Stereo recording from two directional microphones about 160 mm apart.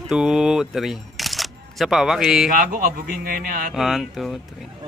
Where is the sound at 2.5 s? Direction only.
60° right (ahead or behind).